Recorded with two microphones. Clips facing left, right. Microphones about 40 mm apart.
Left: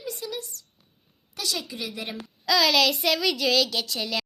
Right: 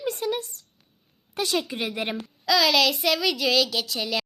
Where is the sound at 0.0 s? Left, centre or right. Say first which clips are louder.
Right 7 dB; right.